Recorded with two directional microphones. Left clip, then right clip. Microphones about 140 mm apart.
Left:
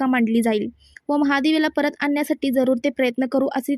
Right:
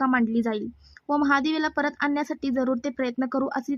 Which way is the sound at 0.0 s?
50° left (ahead or behind).